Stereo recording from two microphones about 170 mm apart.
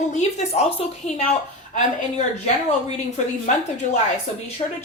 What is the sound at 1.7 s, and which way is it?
Speech, 45° left (ahead or behind).